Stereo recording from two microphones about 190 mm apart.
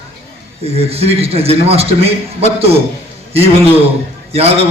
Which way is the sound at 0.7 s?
30° right (ahead or behind).